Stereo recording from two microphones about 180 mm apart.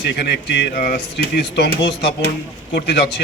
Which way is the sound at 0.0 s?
70° left (ahead or behind).